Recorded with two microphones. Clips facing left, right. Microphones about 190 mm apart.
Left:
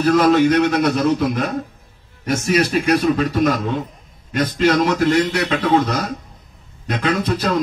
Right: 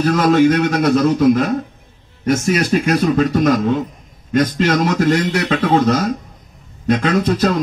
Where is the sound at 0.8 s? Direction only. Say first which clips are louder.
Right 5 dB; 55° right (ahead or behind).